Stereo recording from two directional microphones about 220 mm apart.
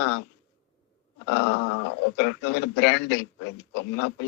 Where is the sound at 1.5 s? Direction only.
90° left.